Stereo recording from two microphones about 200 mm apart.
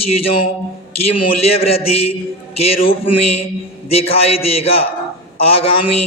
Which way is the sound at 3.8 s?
30° left (ahead or behind).